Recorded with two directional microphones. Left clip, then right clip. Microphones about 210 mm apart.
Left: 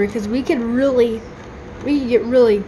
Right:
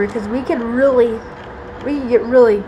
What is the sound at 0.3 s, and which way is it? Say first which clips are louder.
Speech: even; 50° left (ahead or behind).